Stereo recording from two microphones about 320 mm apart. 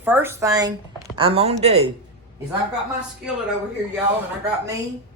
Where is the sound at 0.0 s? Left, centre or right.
Centre.